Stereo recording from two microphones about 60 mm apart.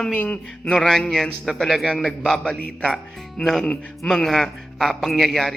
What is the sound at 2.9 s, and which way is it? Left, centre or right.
A man's voice, centre.